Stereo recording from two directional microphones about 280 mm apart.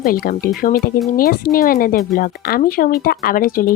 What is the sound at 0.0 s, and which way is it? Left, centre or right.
Speech, left.